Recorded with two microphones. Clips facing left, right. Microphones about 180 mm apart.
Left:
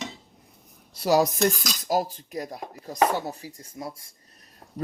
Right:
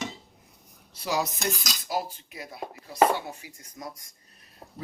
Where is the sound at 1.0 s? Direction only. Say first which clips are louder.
Left 8 dB; 45° left (ahead or behind); by 4.1 s 30° left (ahead or behind).